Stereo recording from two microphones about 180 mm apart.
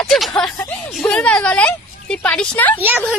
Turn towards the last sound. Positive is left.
turn(degrees=-10)  # may be behind; listen again after turning